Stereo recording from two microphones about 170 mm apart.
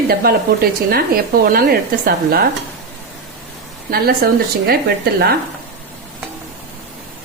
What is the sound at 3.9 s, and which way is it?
Speech, 60° right (ahead or behind).